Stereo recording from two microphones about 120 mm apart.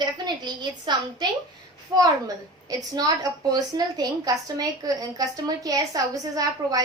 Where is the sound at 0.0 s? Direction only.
40° right (ahead or behind).